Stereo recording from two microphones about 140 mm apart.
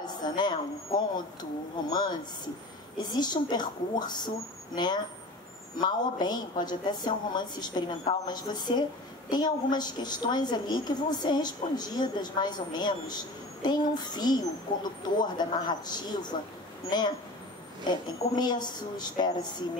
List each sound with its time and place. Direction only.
0.0 s a woman's voice: 30° left (ahead or behind)